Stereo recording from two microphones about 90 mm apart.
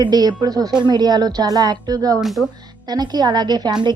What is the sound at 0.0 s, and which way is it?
Speech, 50° right (ahead or behind).